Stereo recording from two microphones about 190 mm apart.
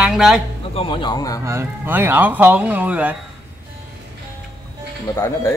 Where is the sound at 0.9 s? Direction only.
25° left (ahead or behind).